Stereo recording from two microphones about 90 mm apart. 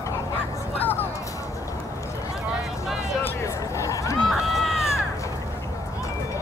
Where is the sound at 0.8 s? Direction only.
20° left (ahead or behind).